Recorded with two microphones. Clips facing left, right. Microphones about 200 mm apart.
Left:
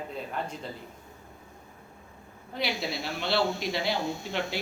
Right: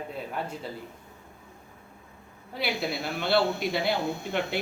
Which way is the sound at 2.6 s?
55° right (ahead or behind).